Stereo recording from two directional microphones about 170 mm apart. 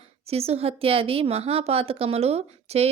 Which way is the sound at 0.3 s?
35° right (ahead or behind).